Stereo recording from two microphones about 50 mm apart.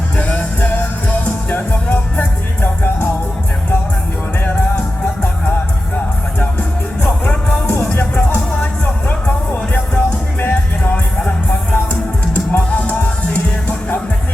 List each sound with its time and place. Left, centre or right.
0.2 s music: left
7.0 s music: left